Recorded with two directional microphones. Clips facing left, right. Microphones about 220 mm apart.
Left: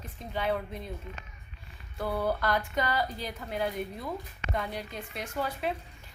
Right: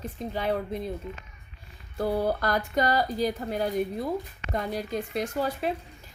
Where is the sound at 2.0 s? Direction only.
40° right (ahead or behind).